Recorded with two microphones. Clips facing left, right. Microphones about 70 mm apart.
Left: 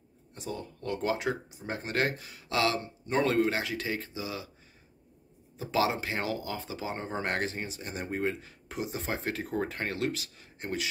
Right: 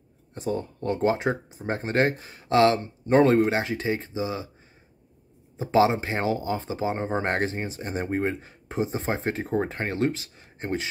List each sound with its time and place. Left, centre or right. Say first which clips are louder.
0.3 s speech: right 9 dB; right
5.6 s speech: right 8 dB; right